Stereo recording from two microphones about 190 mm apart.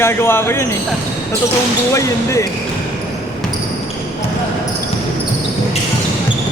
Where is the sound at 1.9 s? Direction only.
15° left (ahead or behind).